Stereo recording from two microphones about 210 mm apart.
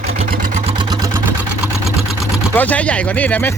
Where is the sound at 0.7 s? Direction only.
20° right (ahead or behind).